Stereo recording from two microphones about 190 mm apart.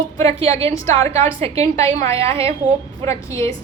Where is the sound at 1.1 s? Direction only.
35° right (ahead or behind).